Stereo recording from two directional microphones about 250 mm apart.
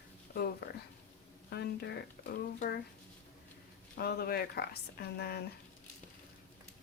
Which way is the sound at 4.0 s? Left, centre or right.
Left.